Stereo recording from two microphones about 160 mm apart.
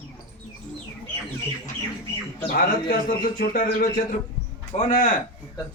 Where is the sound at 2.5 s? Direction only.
65° left (ahead or behind).